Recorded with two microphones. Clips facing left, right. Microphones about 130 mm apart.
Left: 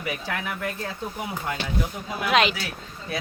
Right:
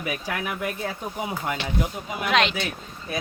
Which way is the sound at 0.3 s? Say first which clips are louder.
Right 2 dB; 10° right (ahead or behind).